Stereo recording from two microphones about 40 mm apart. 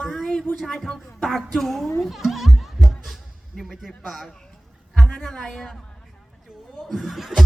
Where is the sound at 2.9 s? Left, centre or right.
Centre.